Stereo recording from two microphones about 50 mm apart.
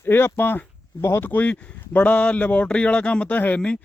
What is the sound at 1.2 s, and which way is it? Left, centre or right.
Speech, left.